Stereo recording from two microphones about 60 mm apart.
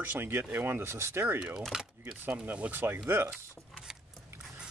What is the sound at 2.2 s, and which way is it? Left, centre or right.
Speech, right.